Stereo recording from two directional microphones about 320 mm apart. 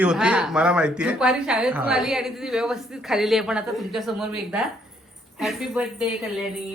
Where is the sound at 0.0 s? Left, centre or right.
Centre.